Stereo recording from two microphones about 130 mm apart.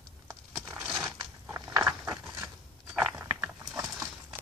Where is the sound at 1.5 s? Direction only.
25° right (ahead or behind).